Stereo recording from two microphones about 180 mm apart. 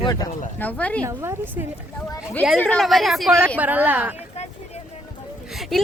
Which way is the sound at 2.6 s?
5° left (ahead or behind).